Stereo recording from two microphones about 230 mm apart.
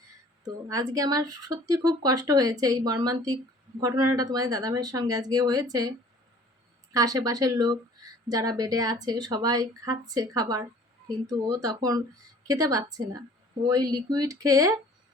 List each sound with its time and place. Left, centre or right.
0.4 s speech: centre
6.9 s speech: centre